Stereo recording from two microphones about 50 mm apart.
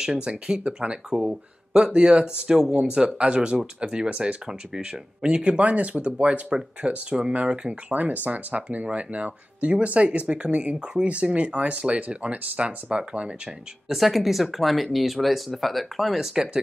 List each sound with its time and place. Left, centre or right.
0.0 s speech: centre
13.8 s speech: centre